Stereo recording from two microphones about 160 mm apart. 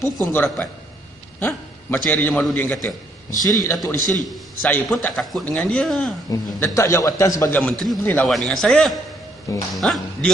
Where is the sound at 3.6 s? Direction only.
25° left (ahead or behind).